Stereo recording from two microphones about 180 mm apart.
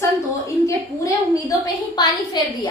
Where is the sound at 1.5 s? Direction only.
20° left (ahead or behind).